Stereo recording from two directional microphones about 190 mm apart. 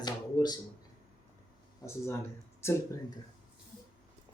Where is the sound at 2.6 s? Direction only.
15° left (ahead or behind).